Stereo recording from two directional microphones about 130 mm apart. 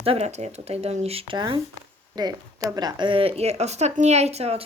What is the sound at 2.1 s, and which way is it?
Speech, 30° right (ahead or behind).